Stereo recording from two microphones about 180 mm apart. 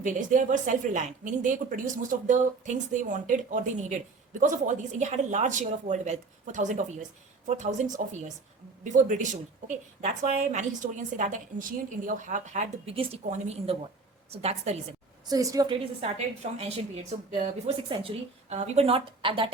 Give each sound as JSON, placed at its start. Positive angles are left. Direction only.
{"t": 0.0, "sound": "a woman's voice", "side_deg": -45}
{"t": 15.3, "sound": "a woman's voice", "side_deg": -20}